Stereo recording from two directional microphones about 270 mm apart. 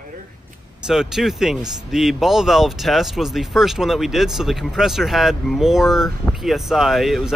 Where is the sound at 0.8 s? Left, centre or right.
Centre.